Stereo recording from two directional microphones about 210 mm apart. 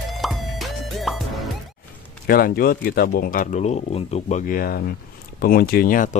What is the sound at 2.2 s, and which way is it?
Speech, 45° left (ahead or behind).